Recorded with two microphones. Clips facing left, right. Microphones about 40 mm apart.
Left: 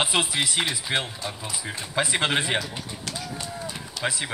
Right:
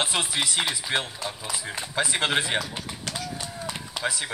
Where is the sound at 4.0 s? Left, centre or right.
Centre.